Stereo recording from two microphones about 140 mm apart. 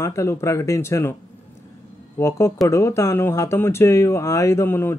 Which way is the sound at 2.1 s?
20° left (ahead or behind).